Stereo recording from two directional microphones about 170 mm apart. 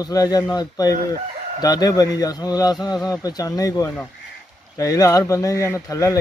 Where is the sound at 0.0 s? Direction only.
20° left (ahead or behind).